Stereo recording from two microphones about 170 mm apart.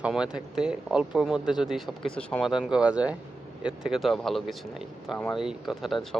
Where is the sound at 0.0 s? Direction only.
5° right (ahead or behind).